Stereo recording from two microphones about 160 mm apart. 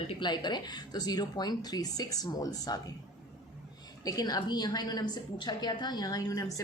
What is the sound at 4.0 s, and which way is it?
A woman's voice, 25° left (ahead or behind).